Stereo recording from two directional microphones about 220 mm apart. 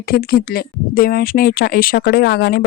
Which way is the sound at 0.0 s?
45° left (ahead or behind).